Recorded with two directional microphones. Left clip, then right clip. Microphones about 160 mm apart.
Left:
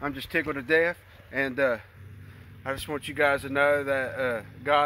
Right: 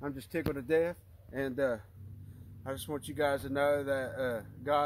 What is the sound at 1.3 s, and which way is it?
Speech, 30° right (ahead or behind).